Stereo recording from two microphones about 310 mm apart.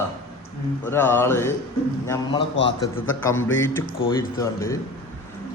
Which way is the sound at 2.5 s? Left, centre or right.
Left.